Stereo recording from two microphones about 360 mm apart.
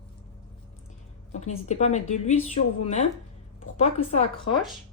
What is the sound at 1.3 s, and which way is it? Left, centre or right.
A woman's voice, centre.